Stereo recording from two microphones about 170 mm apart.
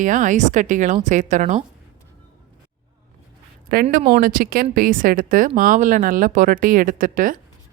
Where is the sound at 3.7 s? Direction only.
60° right (ahead or behind).